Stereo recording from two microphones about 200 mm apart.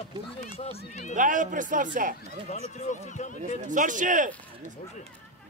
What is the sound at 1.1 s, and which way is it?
A man's voice, 40° right (ahead or behind).